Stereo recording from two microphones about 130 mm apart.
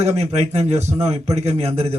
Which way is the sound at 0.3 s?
55° right (ahead or behind).